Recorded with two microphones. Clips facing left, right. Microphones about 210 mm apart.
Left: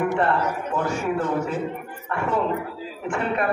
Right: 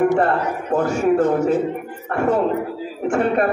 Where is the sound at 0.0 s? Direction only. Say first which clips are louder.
Right 5 dB; 45° right (ahead or behind).